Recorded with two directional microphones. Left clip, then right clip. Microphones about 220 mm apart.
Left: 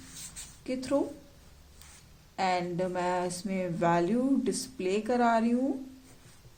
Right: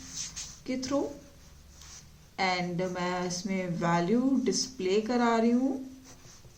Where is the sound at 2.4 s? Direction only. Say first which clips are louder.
Even; 30° left (ahead or behind).